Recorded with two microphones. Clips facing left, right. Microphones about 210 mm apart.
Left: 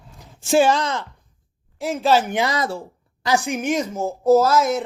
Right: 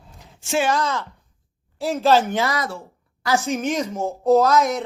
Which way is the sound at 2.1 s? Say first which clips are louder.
Left 1 dB; 15° left (ahead or behind).